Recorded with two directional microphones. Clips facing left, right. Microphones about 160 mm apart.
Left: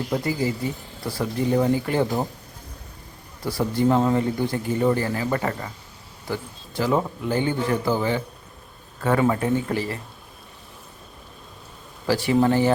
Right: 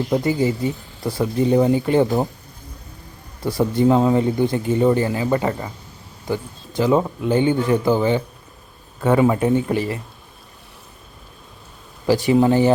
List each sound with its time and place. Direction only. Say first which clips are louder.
0.1 s a man's voice: right 5 dB; 25° right (ahead or behind)
3.4 s a man's voice: right 4 dB; 20° right (ahead or behind)
12.0 s speech: right 4 dB; 15° right (ahead or behind)